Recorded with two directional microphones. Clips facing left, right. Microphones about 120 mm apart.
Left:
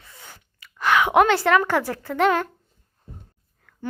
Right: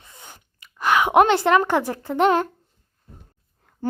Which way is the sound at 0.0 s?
20° right (ahead or behind).